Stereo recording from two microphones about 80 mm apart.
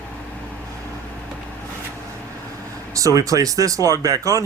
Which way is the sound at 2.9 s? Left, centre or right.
Right.